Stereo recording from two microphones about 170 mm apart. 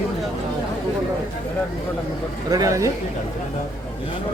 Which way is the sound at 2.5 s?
20° right (ahead or behind).